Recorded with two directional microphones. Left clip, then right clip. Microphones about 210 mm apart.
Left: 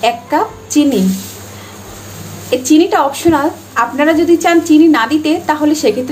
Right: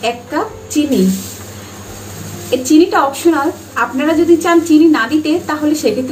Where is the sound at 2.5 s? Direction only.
35° left (ahead or behind).